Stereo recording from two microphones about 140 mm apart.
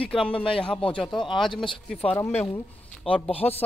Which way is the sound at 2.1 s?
15° left (ahead or behind).